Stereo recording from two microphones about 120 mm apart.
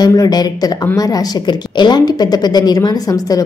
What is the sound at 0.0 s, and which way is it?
A woman's voice, 30° left (ahead or behind).